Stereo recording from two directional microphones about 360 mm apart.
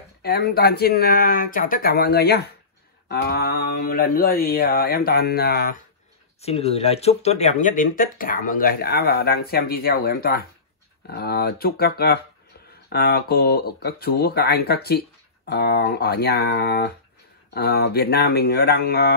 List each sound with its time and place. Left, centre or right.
0.2 s speech: left